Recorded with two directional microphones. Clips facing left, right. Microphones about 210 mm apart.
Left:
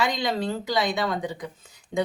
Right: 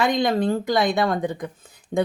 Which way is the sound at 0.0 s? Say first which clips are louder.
Right 5 dB; 55° right (ahead or behind).